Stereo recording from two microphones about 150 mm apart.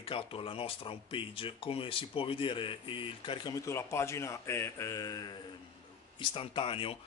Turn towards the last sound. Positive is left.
turn(degrees=35)  # may be behind; listen again after turning